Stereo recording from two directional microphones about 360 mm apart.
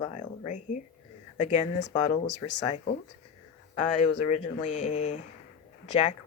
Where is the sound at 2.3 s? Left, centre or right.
Left.